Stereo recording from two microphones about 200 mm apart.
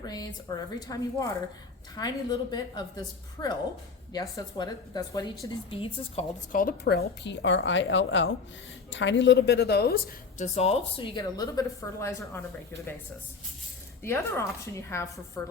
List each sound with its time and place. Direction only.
0.0 s a woman's voice: 20° left (ahead or behind)
6.5 s a woman's voice: 45° left (ahead or behind)
10.3 s a woman's voice: 35° left (ahead or behind); by 12.8 s 15° left (ahead or behind)
14.0 s a woman's voice: 15° left (ahead or behind)